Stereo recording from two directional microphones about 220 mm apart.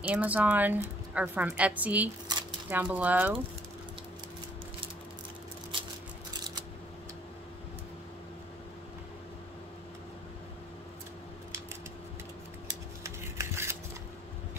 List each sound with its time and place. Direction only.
0.0 s a woman's voice: 5° right (ahead or behind)
2.2 s a sound: 20° right (ahead or behind)
2.8 s a woman's voice: 5° right (ahead or behind)
13.0 s scissors: 10° right (ahead or behind)